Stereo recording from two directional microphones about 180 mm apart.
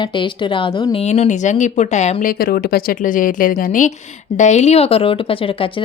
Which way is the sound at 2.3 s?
55° left (ahead or behind).